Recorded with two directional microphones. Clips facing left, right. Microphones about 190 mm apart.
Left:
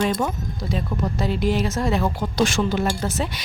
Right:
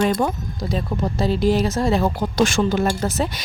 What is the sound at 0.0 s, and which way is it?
A woman's voice, 40° right (ahead or behind).